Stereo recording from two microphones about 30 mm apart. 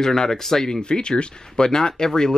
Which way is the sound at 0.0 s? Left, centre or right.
Centre.